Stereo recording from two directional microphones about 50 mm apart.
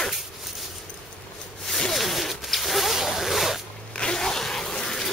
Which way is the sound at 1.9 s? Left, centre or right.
Centre.